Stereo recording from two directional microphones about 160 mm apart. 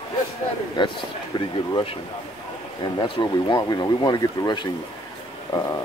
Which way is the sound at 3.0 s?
30° left (ahead or behind).